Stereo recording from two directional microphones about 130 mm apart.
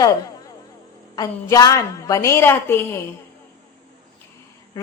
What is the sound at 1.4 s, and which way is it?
A woman's voice, 25° left (ahead or behind).